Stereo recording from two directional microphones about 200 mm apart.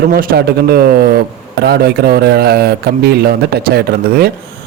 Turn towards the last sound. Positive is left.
turn(degrees=-50)  # may be behind; listen again after turning